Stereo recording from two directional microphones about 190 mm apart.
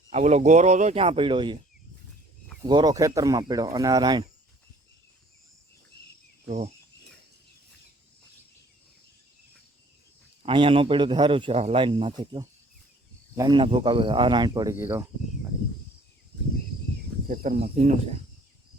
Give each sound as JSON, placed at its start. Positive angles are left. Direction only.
{"t": 0.1, "sound": "speech", "side_deg": -35}
{"t": 2.6, "sound": "speech", "side_deg": -20}
{"t": 10.4, "sound": "speech", "side_deg": -30}
{"t": 17.2, "sound": "speech", "side_deg": -45}